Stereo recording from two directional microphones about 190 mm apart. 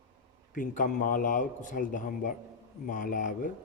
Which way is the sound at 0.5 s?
45° left (ahead or behind).